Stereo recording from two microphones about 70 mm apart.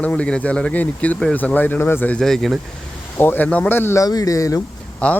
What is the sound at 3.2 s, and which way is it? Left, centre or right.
Speech, left.